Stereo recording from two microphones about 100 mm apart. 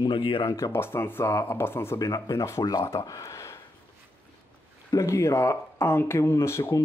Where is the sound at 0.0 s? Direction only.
55° left (ahead or behind).